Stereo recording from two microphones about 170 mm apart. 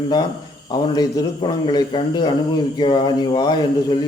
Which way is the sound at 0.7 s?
20° left (ahead or behind).